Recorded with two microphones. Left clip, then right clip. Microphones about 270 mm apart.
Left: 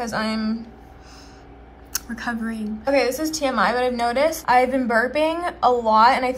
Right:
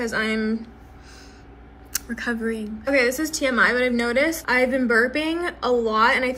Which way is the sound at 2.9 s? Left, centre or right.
Left.